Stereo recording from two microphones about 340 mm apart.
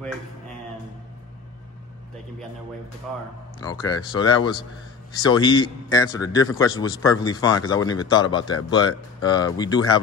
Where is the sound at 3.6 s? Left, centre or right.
Centre.